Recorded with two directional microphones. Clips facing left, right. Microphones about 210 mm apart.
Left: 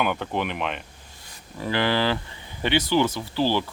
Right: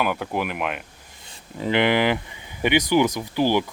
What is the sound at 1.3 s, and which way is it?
Speech, 20° right (ahead or behind).